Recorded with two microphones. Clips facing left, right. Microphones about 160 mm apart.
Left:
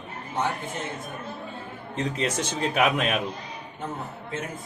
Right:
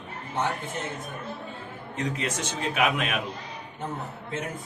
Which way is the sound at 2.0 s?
30° left (ahead or behind).